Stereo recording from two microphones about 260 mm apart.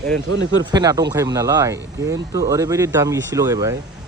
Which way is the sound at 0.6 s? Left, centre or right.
Centre.